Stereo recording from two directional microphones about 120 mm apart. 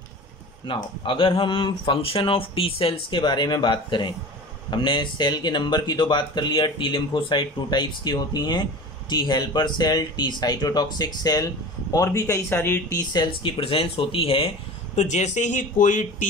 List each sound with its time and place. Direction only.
0.7 s speech: 45° left (ahead or behind); by 12.8 s 20° left (ahead or behind)
12.9 s speech: 40° left (ahead or behind)
15.0 s speech: 75° left (ahead or behind); by 16.1 s 90° left